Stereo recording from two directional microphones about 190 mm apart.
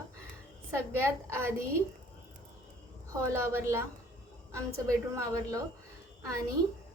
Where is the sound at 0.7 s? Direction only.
15° right (ahead or behind).